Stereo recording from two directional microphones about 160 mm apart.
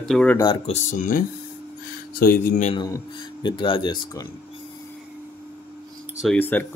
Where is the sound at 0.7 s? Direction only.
50° left (ahead or behind).